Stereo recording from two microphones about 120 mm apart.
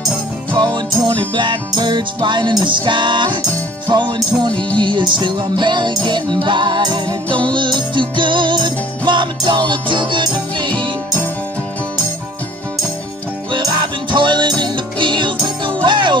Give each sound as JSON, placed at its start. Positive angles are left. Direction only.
{"t": 0.5, "sound": "music", "side_deg": -40}
{"t": 13.5, "sound": "music", "side_deg": -35}